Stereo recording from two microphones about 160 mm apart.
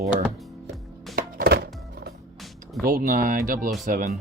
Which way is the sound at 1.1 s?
75° right (ahead or behind).